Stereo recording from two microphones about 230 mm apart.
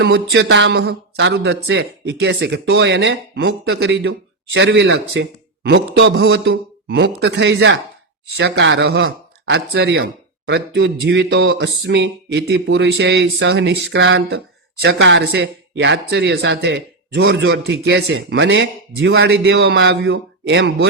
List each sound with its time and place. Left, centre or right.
0.0 s speech: right